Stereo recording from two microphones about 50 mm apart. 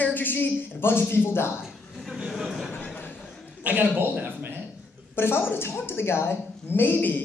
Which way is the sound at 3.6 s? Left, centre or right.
Right.